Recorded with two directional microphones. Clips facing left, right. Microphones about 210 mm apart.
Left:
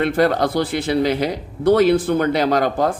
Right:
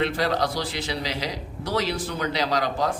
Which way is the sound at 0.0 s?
55° left (ahead or behind).